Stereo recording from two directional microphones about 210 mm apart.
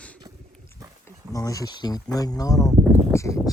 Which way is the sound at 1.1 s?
15° left (ahead or behind).